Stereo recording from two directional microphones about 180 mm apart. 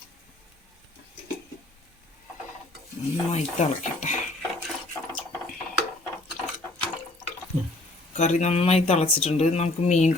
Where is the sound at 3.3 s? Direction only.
40° left (ahead or behind).